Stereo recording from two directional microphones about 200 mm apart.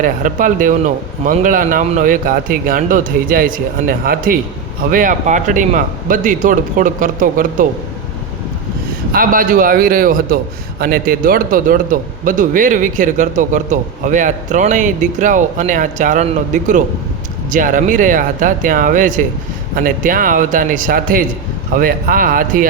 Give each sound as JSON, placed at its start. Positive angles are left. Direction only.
{"t": 0.0, "sound": "a man's voice", "side_deg": -40}
{"t": 9.1, "sound": "a man's voice", "side_deg": -45}